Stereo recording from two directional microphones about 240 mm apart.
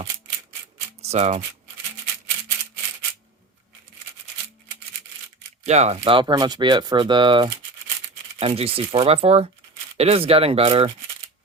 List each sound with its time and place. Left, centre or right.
1.0 s speech: right
5.6 s speech: right